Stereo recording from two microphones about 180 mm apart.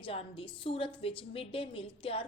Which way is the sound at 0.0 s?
30° left (ahead or behind).